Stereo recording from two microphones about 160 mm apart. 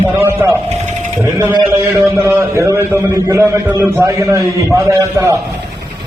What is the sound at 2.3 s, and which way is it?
A man's voice, 15° right (ahead or behind).